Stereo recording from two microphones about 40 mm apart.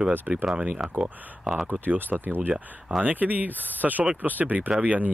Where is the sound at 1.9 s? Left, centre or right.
Right.